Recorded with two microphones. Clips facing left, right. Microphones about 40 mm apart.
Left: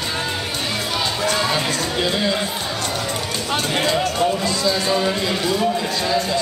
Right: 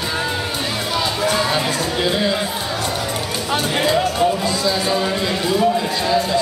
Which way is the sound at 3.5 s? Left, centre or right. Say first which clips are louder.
Right 2 dB; centre.